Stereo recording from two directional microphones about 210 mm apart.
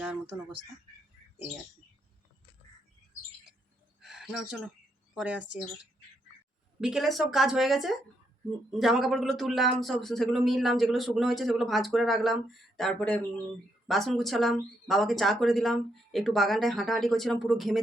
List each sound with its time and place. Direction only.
4.0 s a sound: centre (ahead or behind)
5.1 s speech: 5° right (ahead or behind)
6.8 s speech: centre (ahead or behind)